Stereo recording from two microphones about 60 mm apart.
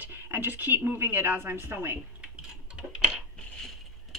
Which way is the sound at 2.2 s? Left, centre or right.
Centre.